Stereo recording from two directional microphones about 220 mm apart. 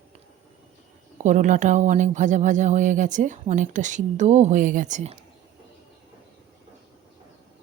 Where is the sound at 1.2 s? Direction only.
35° right (ahead or behind).